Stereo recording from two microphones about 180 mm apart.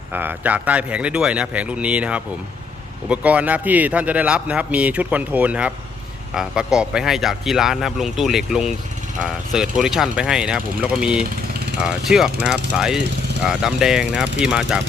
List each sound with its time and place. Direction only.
0.1 s a man's voice: 10° right (ahead or behind)